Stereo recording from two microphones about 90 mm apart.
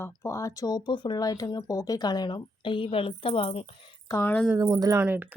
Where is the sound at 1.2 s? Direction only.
40° left (ahead or behind); by 3.7 s 85° left.